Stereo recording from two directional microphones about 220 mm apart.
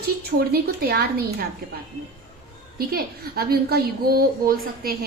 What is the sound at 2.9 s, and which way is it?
A woman's voice, 45° right (ahead or behind).